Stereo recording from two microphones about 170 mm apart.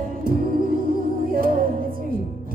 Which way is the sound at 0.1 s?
55° right (ahead or behind).